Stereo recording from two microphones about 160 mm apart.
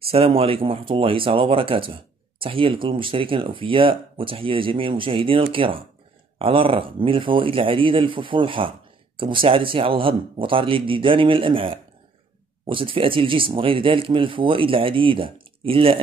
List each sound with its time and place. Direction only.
0.0 s speech: 35° right (ahead or behind)